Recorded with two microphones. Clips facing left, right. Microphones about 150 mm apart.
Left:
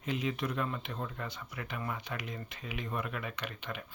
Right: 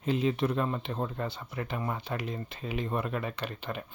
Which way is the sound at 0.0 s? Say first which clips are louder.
Right 7 dB; 30° right (ahead or behind).